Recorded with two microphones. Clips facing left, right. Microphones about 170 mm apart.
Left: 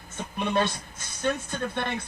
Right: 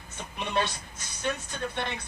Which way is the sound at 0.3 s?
50° left (ahead or behind).